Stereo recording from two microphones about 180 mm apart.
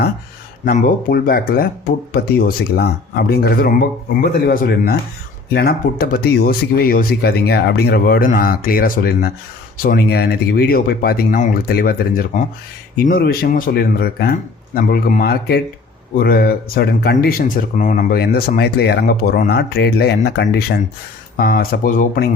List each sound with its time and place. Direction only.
0.6 s speech: 50° left (ahead or behind); by 20.8 s 65° left (ahead or behind)
21.3 s speech: 55° left (ahead or behind)